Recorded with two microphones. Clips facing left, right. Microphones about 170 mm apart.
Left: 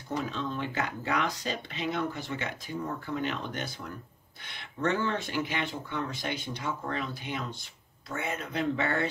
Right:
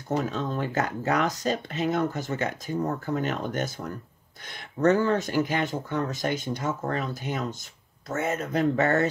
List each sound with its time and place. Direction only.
0.1 s speech: 45° right (ahead or behind)